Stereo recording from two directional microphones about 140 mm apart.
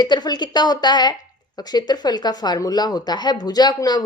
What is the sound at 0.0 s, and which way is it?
A woman's voice, 30° left (ahead or behind).